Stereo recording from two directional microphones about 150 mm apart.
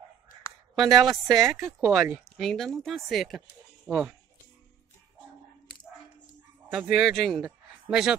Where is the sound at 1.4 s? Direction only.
20° right (ahead or behind).